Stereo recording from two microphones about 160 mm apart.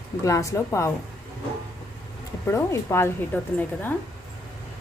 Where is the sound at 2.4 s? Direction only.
15° left (ahead or behind).